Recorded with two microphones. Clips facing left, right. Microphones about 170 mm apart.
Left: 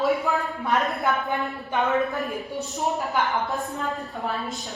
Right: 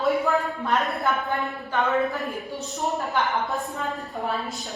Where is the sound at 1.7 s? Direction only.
20° left (ahead or behind).